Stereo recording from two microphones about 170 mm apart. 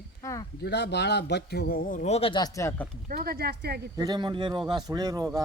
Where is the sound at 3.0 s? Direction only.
60° right (ahead or behind).